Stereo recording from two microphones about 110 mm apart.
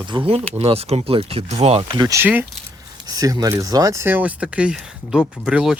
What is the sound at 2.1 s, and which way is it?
Speech, 20° right (ahead or behind).